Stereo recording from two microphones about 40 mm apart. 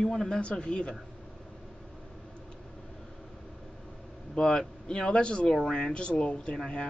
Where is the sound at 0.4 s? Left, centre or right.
Left.